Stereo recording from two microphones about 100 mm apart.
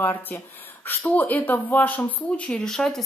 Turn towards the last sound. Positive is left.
turn(degrees=5)  # may be behind; listen again after turning